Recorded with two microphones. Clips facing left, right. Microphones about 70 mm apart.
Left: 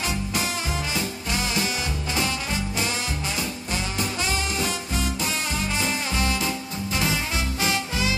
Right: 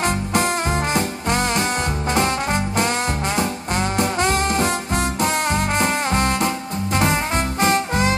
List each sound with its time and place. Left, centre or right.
0.0 s music: right